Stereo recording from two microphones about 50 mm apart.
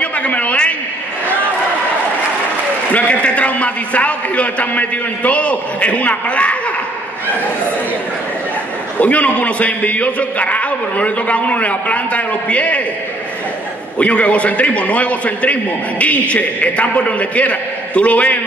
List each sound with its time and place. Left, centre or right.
0.0 s a sound: left
2.9 s a man's voice: left
9.0 s a man's voice: left
13.9 s a man's voice: left